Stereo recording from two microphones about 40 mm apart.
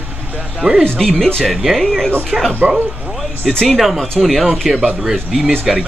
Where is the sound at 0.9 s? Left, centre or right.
Centre.